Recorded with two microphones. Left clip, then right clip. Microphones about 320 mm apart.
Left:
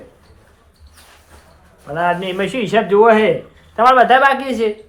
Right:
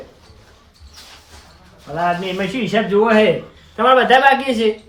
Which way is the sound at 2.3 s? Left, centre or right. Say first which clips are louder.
Left 3 dB; centre.